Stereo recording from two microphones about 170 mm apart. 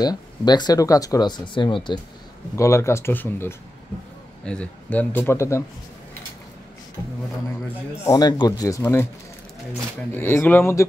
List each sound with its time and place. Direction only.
0.0 s speech: 25° left (ahead or behind)
2.5 s speech: 15° left (ahead or behind)
8.0 s speech: 20° left (ahead or behind)
10.1 s speech: 15° left (ahead or behind)